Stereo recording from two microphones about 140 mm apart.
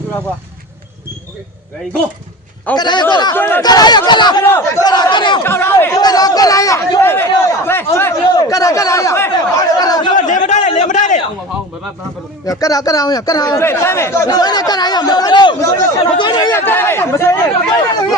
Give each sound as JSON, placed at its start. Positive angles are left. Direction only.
{"t": 2.7, "sound": "speech", "side_deg": 30}
{"t": 3.3, "sound": "speech", "side_deg": 15}
{"t": 3.6, "sound": "speech", "side_deg": 30}
{"t": 4.5, "sound": "speech", "side_deg": 20}
{"t": 5.4, "sound": "speech", "side_deg": 15}
{"t": 6.0, "sound": "speech", "side_deg": 30}
{"t": 10.2, "sound": "a man's voice", "side_deg": 60}
{"t": 10.7, "sound": "a sound", "side_deg": 55}
{"t": 12.5, "sound": "speech", "side_deg": 25}
{"t": 15.6, "sound": "speech", "side_deg": 20}
{"t": 16.1, "sound": "speech", "side_deg": 30}